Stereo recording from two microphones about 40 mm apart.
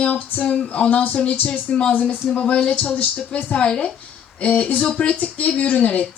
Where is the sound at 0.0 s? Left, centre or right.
Left.